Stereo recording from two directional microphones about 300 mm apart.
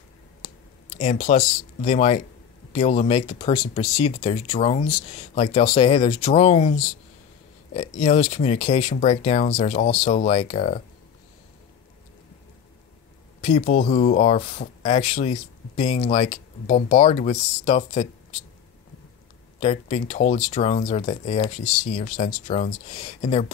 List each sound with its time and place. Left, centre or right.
0.4 s a sound: left
2.7 s speech: left
13.4 s speech: left
19.6 s speech: left